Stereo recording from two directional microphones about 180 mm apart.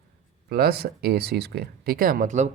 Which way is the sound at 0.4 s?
60° right (ahead or behind).